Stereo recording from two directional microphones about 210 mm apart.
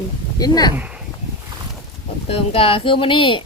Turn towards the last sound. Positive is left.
turn(degrees=25)  # may be behind; listen again after turning